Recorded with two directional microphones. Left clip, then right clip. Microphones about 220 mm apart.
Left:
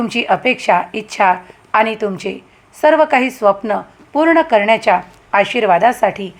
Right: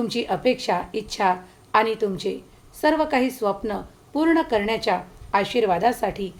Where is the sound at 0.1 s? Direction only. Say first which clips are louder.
Left 9 dB; 5° right (ahead or behind).